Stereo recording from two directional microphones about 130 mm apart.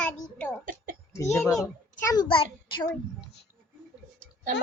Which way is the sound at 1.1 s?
25° left (ahead or behind).